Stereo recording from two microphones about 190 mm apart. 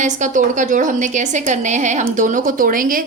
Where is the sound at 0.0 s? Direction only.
40° right (ahead or behind).